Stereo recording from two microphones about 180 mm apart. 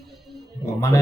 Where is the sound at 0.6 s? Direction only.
15° left (ahead or behind).